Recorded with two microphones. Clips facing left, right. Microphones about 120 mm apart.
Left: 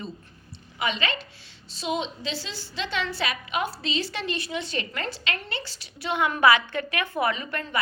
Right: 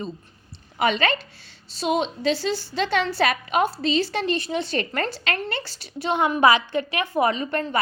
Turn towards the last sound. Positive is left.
turn(degrees=-30)  # may be behind; listen again after turning